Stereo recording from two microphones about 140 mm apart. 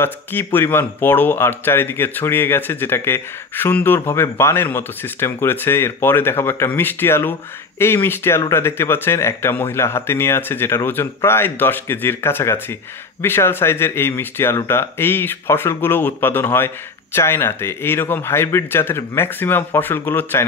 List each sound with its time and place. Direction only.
0.0 s speech: 15° left (ahead or behind)